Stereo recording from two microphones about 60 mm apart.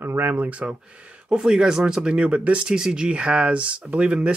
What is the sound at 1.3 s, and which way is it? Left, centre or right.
Speech, centre.